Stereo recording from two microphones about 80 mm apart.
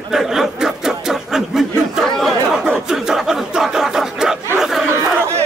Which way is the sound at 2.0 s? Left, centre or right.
Centre.